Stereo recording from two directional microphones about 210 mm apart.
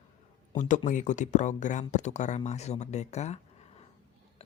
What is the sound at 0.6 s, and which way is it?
Speech, 35° left (ahead or behind).